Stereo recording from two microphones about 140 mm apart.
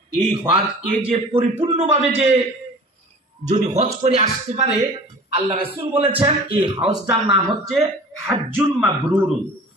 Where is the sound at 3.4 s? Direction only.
55° right (ahead or behind).